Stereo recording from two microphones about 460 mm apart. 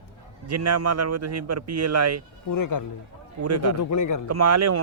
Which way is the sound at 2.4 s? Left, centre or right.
Left.